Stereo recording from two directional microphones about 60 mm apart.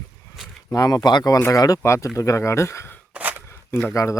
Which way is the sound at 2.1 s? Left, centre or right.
Left.